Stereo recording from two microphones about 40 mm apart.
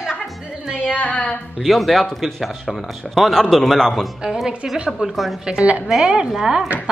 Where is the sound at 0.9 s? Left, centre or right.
Left.